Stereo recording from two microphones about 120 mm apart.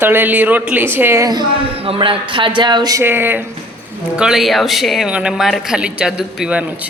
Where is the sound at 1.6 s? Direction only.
50° right (ahead or behind).